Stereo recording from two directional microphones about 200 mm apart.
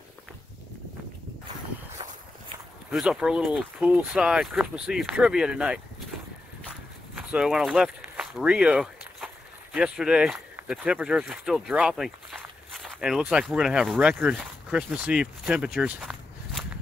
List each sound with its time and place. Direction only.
2.0 s walk: 25° right (ahead or behind)
2.9 s speech: 5° right (ahead or behind)
7.3 s speech: 5° right (ahead or behind)